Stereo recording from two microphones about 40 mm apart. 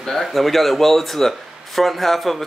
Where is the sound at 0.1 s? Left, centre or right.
Centre.